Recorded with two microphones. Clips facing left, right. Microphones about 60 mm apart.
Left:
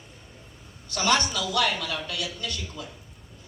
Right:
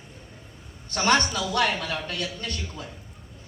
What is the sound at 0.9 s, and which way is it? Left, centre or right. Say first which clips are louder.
A woman's voice: right 2 dB; right.